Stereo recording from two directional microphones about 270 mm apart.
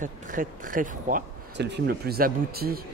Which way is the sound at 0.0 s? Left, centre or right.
Right.